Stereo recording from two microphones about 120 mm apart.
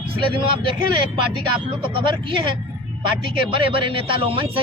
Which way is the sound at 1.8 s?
45° right (ahead or behind).